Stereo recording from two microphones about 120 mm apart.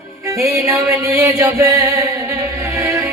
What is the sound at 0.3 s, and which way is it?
Music, 25° right (ahead or behind).